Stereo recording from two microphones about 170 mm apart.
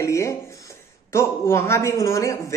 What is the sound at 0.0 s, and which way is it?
Speech, 15° left (ahead or behind).